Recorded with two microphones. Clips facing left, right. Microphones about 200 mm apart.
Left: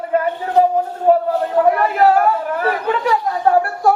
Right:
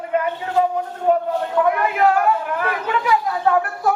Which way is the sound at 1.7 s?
35° left (ahead or behind).